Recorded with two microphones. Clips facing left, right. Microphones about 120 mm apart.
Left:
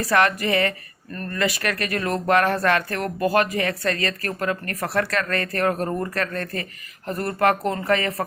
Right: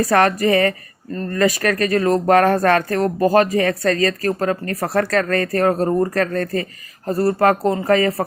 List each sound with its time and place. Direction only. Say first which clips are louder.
0.0 s speech: right 5 dB; 40° right (ahead or behind)
1.1 s speech: right 7 dB; 25° right (ahead or behind)
1.4 s speech: right 7 dB; 40° right (ahead or behind)